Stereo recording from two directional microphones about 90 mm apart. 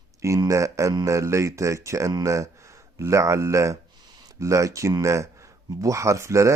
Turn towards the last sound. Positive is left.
turn(degrees=-35)  # may be behind; listen again after turning